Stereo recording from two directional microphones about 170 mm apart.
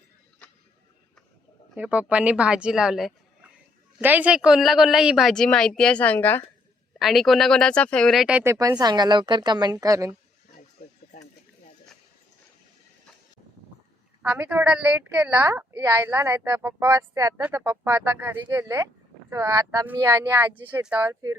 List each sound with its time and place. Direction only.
1.7 s speech: 10° right (ahead or behind); by 6.4 s 10° left (ahead or behind)
7.0 s speech: centre (ahead or behind)
8.8 s a woman's voice: 25° right (ahead or behind)
14.2 s a woman's voice: 10° right (ahead or behind)
20.4 s speech: 10° right (ahead or behind)